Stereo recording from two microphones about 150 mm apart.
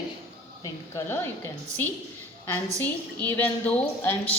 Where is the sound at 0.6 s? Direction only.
15° left (ahead or behind).